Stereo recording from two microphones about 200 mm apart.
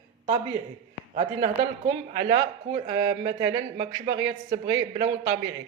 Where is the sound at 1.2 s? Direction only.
30° right (ahead or behind).